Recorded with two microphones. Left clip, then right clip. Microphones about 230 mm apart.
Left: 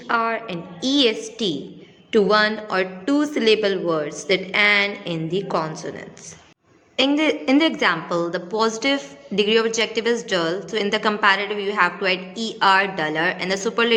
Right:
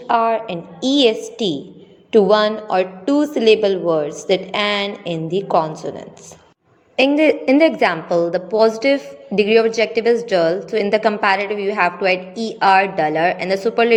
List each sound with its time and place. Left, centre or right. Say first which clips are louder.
0.1 s a woman's voice: right 5 dB; centre
6.9 s a woman's voice: right 5 dB; centre